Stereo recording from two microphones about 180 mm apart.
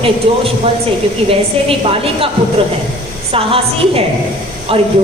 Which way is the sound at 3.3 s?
30° right (ahead or behind).